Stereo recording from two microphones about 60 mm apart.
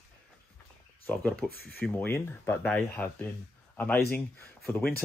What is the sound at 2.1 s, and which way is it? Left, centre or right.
Speech, left.